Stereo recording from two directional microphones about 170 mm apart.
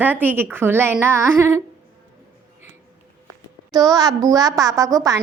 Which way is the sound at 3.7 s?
20° right (ahead or behind).